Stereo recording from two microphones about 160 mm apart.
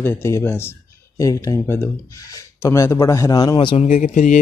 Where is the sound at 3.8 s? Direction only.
45° left (ahead or behind).